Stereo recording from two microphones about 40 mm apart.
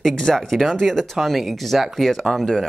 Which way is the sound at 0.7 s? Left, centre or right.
Centre.